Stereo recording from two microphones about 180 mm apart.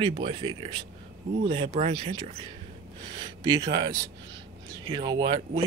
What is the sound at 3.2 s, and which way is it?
Speech, 25° right (ahead or behind).